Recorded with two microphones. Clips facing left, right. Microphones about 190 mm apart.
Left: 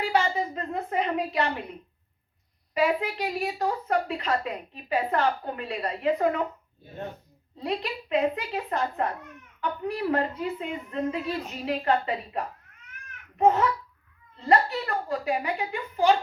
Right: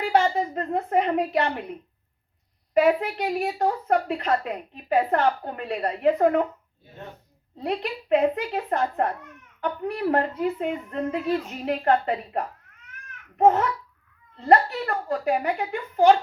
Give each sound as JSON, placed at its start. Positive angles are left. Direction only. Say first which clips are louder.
{"t": 0.0, "sound": "a woman's voice", "louder": "right 4 dB", "side_deg": -55}
{"t": 2.7, "sound": "a woman's voice", "louder": "right 5 dB", "side_deg": -55}
{"t": 7.6, "sound": "a woman's voice", "louder": "right 2 dB", "side_deg": -55}
{"t": 13.4, "sound": "babbling", "louder": "right 2 dB", "side_deg": -55}
{"t": 14.4, "sound": "a woman's voice", "louder": "right 4 dB", "side_deg": -50}